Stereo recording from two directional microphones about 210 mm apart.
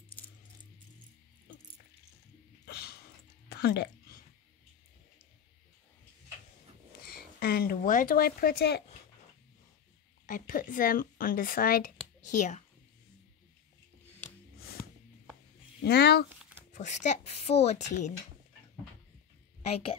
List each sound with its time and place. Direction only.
2.6 s a sound: 50° left (ahead or behind)
3.4 s music: 50° left (ahead or behind)
7.1 s speech: 45° left (ahead or behind)
10.2 s speech: 40° left (ahead or behind)
15.8 s speech: 50° left (ahead or behind)
16.7 s speech: 35° left (ahead or behind)